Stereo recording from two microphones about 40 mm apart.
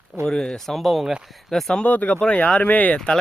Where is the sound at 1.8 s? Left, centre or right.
Left.